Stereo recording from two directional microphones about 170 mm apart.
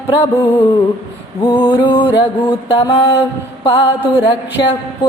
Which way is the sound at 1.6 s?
30° left (ahead or behind).